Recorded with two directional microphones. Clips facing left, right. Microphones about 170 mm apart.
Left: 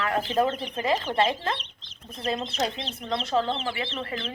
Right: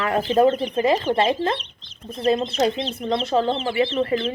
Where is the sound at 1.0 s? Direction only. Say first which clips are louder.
Right 5 dB; 30° right (ahead or behind).